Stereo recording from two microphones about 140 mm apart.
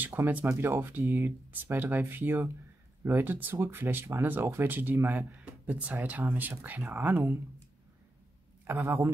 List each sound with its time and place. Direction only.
0.0 s speech: 15° right (ahead or behind)
8.6 s speech: 15° right (ahead or behind)